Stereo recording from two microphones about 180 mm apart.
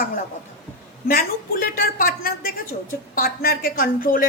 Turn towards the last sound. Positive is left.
turn(degrees=50)  # may be behind; listen again after turning